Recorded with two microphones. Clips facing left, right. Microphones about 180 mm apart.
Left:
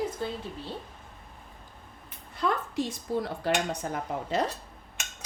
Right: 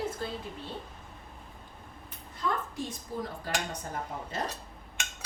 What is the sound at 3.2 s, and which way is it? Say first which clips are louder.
Speech: left 6 dB; 85° left.